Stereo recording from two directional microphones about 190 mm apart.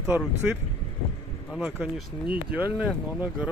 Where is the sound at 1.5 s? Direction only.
Centre (ahead or behind).